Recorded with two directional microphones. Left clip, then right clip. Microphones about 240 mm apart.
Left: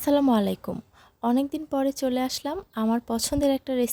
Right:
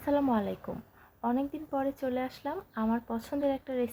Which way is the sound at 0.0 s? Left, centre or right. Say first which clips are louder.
Left 7 dB; left.